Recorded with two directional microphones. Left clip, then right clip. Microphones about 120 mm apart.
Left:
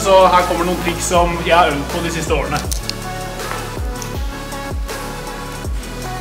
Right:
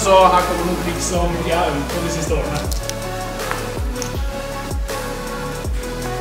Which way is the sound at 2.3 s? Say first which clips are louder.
Left 5 dB; 35° left (ahead or behind).